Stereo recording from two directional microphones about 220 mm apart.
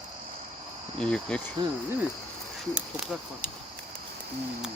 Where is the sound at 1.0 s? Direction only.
5° left (ahead or behind).